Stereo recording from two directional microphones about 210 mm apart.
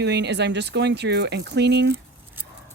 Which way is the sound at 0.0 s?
55° right (ahead or behind).